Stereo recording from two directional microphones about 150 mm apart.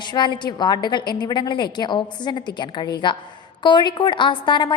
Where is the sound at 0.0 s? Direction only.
30° left (ahead or behind).